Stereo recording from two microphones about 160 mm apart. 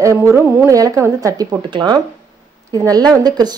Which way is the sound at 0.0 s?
15° right (ahead or behind).